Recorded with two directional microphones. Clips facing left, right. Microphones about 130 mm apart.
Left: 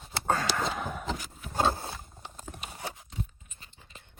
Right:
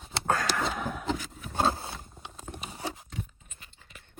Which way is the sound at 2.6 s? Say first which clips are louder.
Right 3 dB; 30° right (ahead or behind).